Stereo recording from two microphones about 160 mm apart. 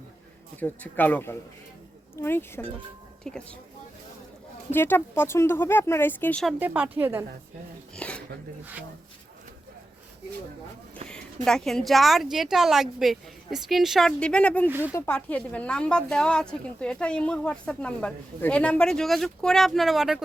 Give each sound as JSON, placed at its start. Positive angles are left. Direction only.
{"t": 0.6, "sound": "speech", "side_deg": 10}
{"t": 3.3, "sound": "speech", "side_deg": 5}
{"t": 4.7, "sound": "speech", "side_deg": 15}
{"t": 6.6, "sound": "speech", "side_deg": -10}
{"t": 7.9, "sound": "a sound", "side_deg": 5}
{"t": 11.4, "sound": "speech", "side_deg": 5}
{"t": 14.7, "sound": "speech", "side_deg": -10}
{"t": 14.9, "sound": "speech", "side_deg": 10}